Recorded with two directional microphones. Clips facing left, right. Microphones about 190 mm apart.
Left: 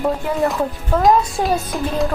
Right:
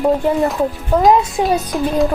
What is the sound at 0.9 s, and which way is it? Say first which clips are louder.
Speech: right 3 dB; 15° right (ahead or behind).